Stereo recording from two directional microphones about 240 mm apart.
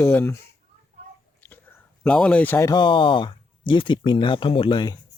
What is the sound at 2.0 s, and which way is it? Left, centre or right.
Speech, centre.